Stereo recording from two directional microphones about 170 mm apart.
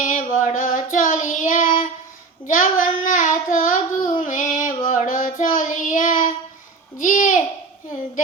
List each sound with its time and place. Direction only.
0.0 s child singing: 50° left (ahead or behind)
7.0 s babbling: 50° left (ahead or behind)